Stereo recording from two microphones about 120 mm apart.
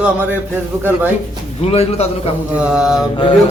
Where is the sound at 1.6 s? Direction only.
55° left (ahead or behind).